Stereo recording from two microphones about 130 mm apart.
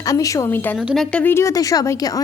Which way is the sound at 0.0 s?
25° left (ahead or behind).